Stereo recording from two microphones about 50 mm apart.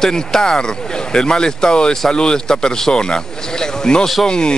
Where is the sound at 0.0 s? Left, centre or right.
Centre.